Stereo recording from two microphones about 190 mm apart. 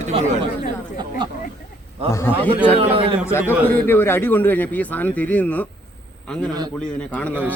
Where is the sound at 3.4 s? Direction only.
10° right (ahead or behind).